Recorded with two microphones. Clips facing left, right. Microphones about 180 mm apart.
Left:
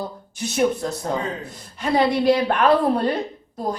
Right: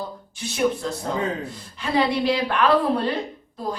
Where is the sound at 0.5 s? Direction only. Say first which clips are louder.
Left 2 dB; 45° left (ahead or behind).